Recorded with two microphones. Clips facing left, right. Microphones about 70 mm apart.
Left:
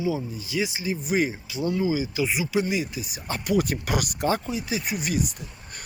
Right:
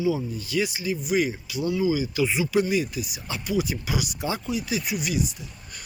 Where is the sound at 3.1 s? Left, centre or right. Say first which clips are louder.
Left 3 dB; left.